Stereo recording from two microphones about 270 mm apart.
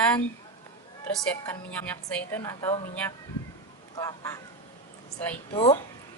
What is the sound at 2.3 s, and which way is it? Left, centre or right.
Speech, centre.